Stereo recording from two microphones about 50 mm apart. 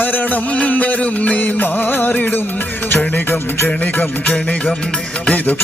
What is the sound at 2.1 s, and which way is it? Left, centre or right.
Music, left.